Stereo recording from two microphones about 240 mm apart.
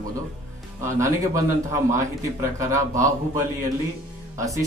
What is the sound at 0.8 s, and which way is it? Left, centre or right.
Speech, centre.